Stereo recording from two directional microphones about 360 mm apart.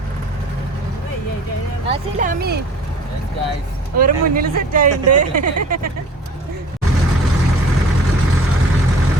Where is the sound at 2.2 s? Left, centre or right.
Right.